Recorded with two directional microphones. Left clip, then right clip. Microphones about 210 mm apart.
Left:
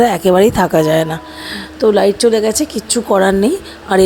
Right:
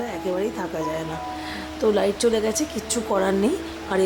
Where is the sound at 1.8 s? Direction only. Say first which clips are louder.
Left 10 dB; 30° left (ahead or behind).